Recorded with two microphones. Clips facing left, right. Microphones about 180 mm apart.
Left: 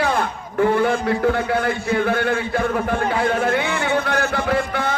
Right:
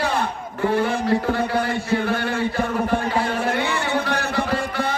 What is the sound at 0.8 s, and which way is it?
A man's voice, 55° left (ahead or behind).